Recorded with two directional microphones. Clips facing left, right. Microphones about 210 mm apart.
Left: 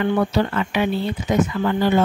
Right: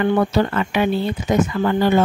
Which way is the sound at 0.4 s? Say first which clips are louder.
Right 2 dB; 50° right (ahead or behind).